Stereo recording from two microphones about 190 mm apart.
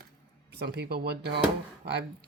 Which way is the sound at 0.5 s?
60° right (ahead or behind).